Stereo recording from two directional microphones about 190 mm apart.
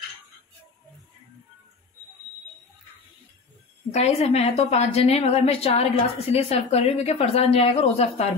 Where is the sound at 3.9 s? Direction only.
35° left (ahead or behind).